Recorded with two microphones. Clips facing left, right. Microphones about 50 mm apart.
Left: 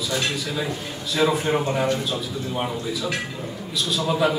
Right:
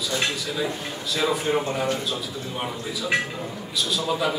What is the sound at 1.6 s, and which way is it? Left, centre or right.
Speech, left.